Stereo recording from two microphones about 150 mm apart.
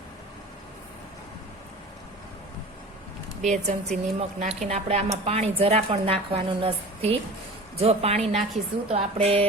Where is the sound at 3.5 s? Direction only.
50° right (ahead or behind).